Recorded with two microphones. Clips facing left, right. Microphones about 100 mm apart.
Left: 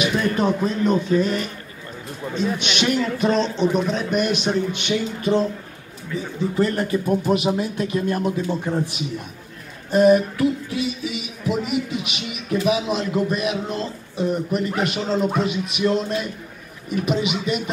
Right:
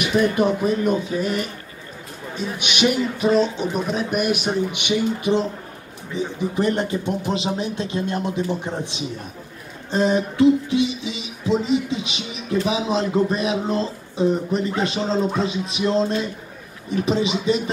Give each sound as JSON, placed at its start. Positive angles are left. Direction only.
{"t": 0.4, "sound": "a man's voice", "side_deg": -15}
{"t": 2.3, "sound": "a man's voice", "side_deg": -10}
{"t": 9.8, "sound": "music", "side_deg": -25}